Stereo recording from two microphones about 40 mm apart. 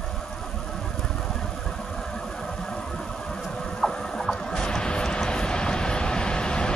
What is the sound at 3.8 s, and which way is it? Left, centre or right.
Vehicle, centre.